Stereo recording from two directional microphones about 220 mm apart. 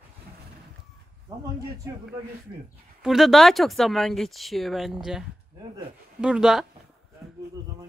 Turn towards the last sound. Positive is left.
turn(degrees=0)  # may be behind; listen again after turning